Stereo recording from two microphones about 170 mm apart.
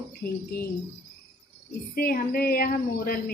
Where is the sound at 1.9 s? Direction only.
60° left (ahead or behind).